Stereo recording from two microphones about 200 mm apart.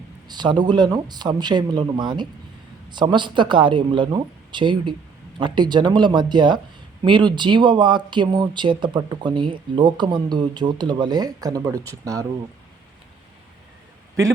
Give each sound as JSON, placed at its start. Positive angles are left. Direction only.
{"t": 0.3, "sound": "speech", "side_deg": -20}